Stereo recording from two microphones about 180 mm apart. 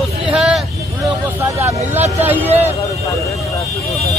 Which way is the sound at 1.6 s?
10° right (ahead or behind).